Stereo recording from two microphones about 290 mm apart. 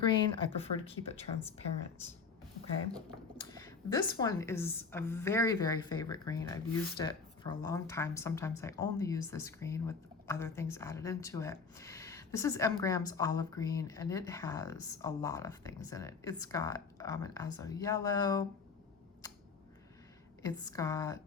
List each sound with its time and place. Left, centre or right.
0.0 s speech: centre
3.3 s speech: centre
20.4 s speech: centre